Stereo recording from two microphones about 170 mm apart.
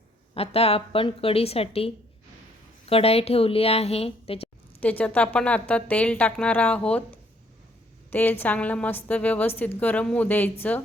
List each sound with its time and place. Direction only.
0.3 s a woman's voice: 35° left (ahead or behind)
4.8 s a woman's voice: 10° left (ahead or behind)